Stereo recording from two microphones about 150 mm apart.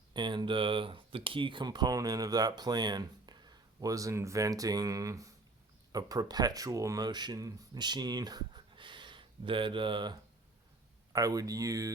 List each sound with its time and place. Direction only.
0.1 s speech: 30° right (ahead or behind)